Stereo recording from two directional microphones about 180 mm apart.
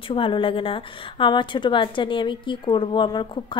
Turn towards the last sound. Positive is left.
turn(degrees=25)  # may be behind; listen again after turning